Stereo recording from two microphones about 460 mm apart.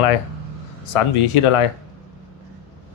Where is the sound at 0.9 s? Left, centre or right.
Left.